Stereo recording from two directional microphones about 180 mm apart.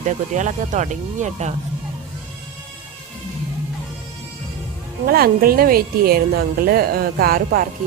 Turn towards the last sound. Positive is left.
turn(degrees=-55)  # may be behind; listen again after turning